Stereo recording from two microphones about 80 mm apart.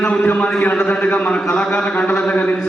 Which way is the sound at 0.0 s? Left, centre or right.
Centre.